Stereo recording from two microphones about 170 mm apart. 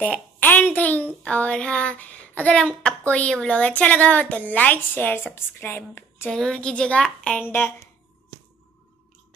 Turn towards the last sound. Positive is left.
turn(degrees=10)  # may be behind; listen again after turning